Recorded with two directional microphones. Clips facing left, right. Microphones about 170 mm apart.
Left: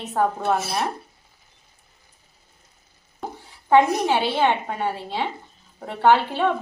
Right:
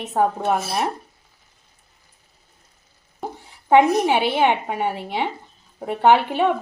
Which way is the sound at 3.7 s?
15° right (ahead or behind).